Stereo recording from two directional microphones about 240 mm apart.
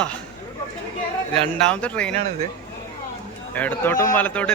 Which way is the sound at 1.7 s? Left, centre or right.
Centre.